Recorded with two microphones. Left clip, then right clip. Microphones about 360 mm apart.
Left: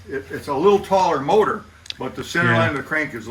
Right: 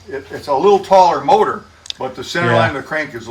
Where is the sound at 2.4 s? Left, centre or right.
Centre.